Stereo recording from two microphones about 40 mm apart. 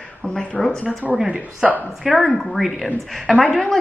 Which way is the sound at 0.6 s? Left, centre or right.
Centre.